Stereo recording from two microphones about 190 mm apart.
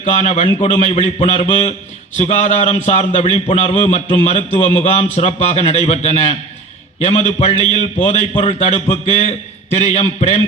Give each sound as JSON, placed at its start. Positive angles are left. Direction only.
{"t": 0.0, "sound": "a man's voice", "side_deg": 35}